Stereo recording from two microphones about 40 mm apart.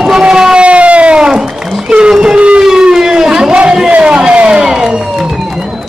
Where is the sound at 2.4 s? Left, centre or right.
Right.